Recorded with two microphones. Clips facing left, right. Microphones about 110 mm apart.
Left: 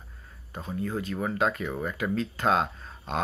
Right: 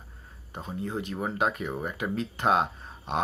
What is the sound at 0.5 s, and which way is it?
Speech, 25° right (ahead or behind).